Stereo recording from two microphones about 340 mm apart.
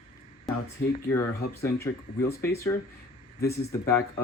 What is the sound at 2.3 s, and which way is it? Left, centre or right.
Speech, centre.